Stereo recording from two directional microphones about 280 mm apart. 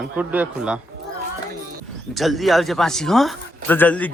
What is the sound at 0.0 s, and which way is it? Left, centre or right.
Speech, centre.